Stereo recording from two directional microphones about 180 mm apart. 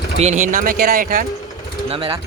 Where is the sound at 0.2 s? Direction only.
40° right (ahead or behind).